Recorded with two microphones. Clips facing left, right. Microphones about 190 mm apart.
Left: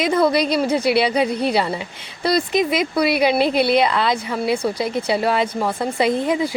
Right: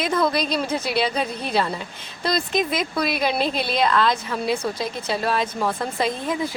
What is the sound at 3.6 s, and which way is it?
Speech, 65° left (ahead or behind).